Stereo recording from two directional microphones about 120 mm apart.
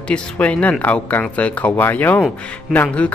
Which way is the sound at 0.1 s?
10° left (ahead or behind).